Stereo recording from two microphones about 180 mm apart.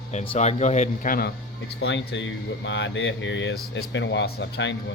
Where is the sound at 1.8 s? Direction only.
80° left.